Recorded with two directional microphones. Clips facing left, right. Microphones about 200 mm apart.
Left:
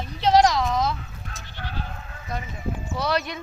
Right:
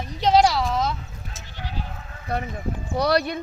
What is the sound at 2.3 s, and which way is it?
Speech, 60° right (ahead or behind).